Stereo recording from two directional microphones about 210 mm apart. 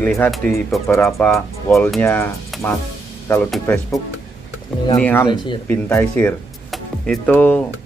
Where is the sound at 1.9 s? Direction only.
10° left (ahead or behind).